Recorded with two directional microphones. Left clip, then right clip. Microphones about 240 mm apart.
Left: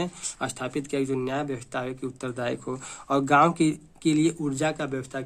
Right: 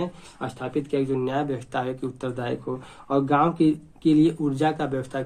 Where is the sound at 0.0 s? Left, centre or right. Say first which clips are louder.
Even; left.